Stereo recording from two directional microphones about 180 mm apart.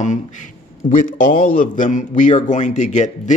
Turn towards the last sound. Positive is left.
turn(degrees=40)  # may be behind; listen again after turning